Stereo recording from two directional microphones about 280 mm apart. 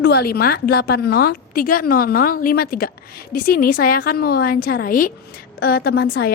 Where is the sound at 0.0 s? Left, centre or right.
Left.